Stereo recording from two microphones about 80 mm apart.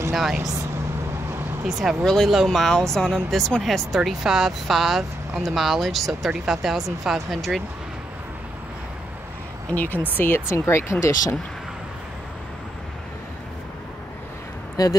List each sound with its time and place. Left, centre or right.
0.1 s speech: centre
1.7 s speech: centre
9.7 s speech: left
14.8 s speech: left